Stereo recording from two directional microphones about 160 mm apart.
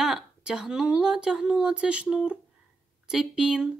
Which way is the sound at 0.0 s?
5° right (ahead or behind).